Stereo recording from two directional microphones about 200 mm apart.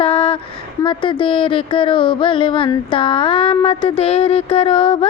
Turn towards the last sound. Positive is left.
turn(degrees=25)  # may be behind; listen again after turning